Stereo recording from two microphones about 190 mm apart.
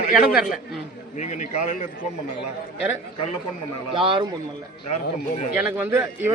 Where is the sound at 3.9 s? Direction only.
25° right (ahead or behind).